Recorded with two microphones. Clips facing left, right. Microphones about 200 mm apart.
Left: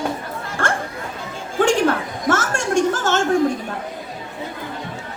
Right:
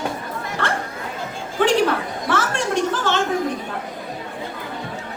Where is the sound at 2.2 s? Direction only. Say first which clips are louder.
Left 3 dB; 45° left (ahead or behind).